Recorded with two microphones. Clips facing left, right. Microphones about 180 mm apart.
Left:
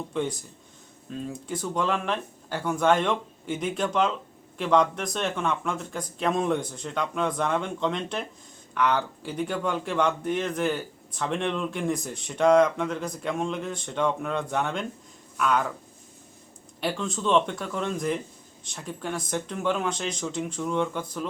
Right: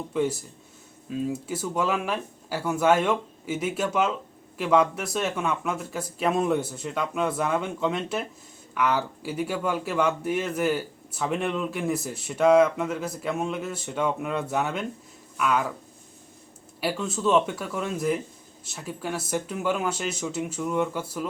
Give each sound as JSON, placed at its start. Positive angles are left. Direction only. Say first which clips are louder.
{"t": 0.1, "sound": "a man's voice", "louder": "right 6 dB", "side_deg": -5}
{"t": 16.8, "sound": "a man's voice", "louder": "right 2 dB", "side_deg": -5}